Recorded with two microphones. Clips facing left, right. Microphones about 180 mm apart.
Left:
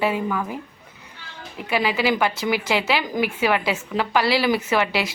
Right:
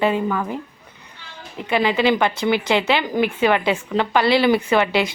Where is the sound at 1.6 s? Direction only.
5° left (ahead or behind).